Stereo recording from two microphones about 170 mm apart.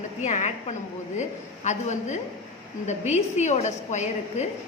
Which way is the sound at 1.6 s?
45° left (ahead or behind).